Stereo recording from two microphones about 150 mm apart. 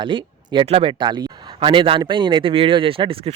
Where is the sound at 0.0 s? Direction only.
30° right (ahead or behind).